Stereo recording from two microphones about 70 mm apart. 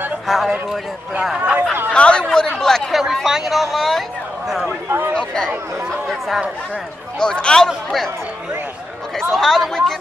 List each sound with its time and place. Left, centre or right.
0.3 s speech: centre
1.4 s speech: right
1.9 s chatter: centre
3.3 s speech: centre
5.1 s speech: centre
6.0 s speech: centre
7.2 s speech: centre
9.3 s speech: centre